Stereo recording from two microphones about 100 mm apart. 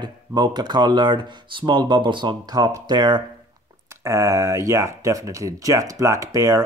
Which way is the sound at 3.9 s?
30° right (ahead or behind).